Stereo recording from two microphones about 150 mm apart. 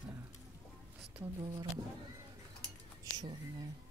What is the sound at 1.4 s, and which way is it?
Speech, 30° right (ahead or behind).